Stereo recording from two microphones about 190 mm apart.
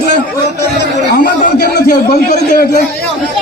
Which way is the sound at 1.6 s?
55° left (ahead or behind).